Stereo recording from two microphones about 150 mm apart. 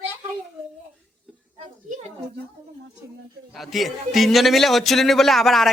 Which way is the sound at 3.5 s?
Centre (ahead or behind).